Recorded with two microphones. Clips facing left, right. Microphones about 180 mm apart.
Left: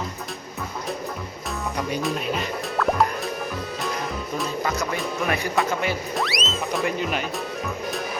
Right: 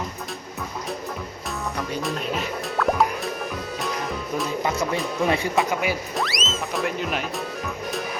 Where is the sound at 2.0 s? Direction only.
Centre (ahead or behind).